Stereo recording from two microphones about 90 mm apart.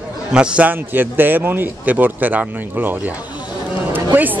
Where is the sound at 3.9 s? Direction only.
20° right (ahead or behind).